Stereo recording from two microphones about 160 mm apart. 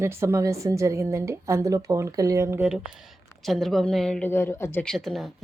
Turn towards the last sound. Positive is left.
turn(degrees=0)  # may be behind; listen again after turning